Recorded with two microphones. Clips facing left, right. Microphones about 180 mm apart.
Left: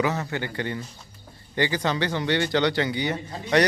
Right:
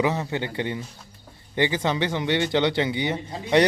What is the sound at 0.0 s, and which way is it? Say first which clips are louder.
Speech: right 2 dB; 20° right (ahead or behind).